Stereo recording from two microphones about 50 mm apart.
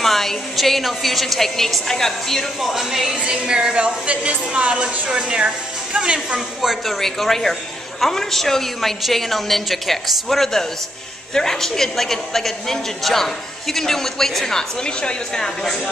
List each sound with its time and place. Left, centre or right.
0.0 s a woman's voice: centre
2.7 s a woman's voice: centre
3.2 s a woman's voice: centre
7.0 s a woman's voice: centre